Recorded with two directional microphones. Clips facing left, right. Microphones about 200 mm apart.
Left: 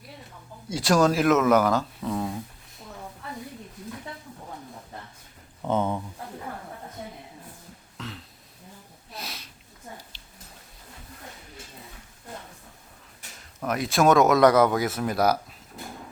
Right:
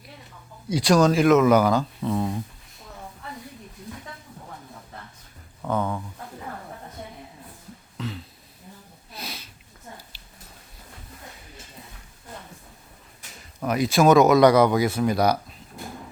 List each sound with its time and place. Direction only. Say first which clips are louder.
0.7 s speech: right 3 dB; centre (ahead or behind)
5.6 s speech: left 1 dB; 20° left (ahead or behind)
7.9 s beatboxing: right 6 dB; centre (ahead or behind)
9.1 s sniff: right 1 dB; centre (ahead or behind)
13.6 s speech: right 3 dB; centre (ahead or behind)